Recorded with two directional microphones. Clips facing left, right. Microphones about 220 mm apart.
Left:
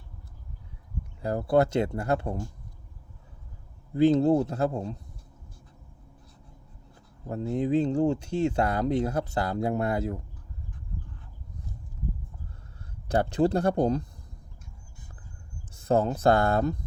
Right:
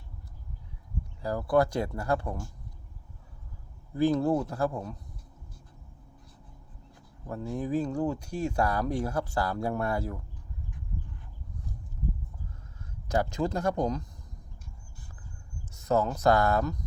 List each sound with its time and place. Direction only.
1.2 s speech: 25° left (ahead or behind)
3.9 s speech: 20° left (ahead or behind)
7.3 s speech: 25° left (ahead or behind)
13.1 s speech: 35° left (ahead or behind)
15.7 s speech: 30° left (ahead or behind)